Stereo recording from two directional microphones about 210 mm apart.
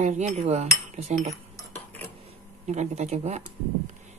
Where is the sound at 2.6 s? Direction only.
35° right (ahead or behind).